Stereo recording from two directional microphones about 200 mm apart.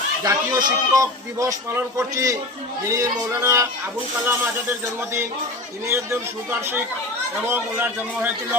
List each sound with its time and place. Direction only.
0.2 s speech: 15° right (ahead or behind)
5.9 s speech: 10° right (ahead or behind)